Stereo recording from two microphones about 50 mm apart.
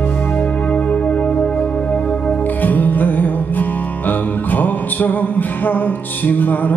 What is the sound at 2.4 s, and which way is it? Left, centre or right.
Music, left.